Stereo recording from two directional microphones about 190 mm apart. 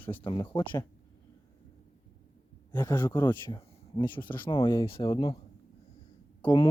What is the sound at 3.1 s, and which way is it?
Speech, 20° left (ahead or behind).